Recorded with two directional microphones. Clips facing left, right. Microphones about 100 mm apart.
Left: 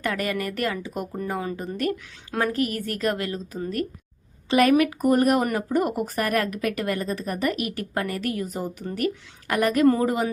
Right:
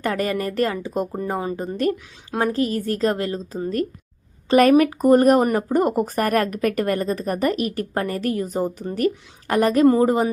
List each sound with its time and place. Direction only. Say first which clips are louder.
0.0 s a woman's voice: right 4 dB; 35° right (ahead or behind)